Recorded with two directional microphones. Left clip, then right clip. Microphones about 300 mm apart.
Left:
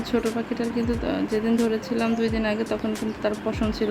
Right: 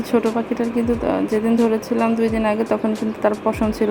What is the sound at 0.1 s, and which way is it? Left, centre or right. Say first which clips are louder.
A woman's voice: right 7 dB; centre.